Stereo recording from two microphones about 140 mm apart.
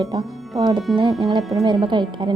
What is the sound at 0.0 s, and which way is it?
Speech, 30° right (ahead or behind).